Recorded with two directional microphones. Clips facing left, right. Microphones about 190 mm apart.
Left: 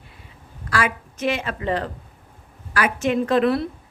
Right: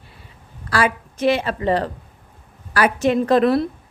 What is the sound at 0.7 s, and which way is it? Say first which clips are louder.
A woman's voice: right 4 dB; 35° right (ahead or behind).